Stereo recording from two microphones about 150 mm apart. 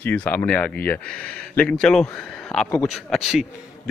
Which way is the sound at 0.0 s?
10° left (ahead or behind).